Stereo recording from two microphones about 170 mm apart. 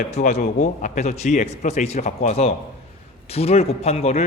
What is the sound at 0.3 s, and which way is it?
A man's voice, 45° left (ahead or behind).